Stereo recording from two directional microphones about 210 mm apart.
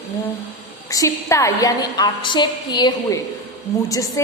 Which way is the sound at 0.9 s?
15° left (ahead or behind).